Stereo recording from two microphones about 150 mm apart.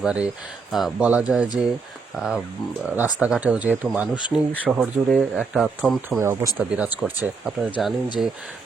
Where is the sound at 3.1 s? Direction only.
5° right (ahead or behind).